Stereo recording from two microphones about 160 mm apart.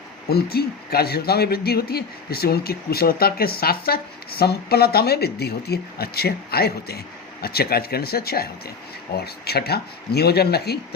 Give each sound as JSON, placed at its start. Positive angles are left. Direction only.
{"t": 0.3, "sound": "speech", "side_deg": 75}